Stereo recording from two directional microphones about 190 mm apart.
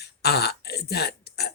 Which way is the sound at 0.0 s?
55° left (ahead or behind).